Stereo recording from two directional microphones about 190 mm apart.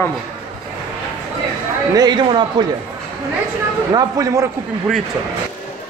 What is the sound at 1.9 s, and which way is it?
Speech, 20° right (ahead or behind).